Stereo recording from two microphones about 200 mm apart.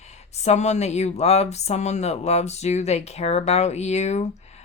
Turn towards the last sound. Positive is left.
turn(degrees=35)  # may be behind; listen again after turning